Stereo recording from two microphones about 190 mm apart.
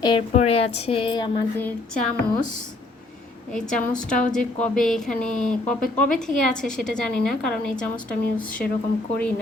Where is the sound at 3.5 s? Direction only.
5° left (ahead or behind).